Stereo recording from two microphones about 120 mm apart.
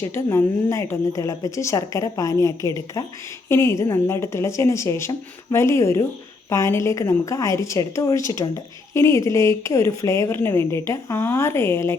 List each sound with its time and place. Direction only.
0.0 s speech: 20° left (ahead or behind)